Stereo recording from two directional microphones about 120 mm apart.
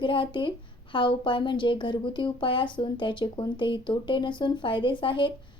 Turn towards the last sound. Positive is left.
turn(degrees=45)  # may be behind; listen again after turning